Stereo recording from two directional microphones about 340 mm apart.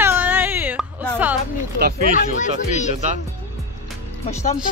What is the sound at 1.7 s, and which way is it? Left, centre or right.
Speech, right.